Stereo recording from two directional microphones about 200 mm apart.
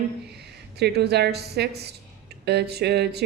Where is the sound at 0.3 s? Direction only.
55° right (ahead or behind).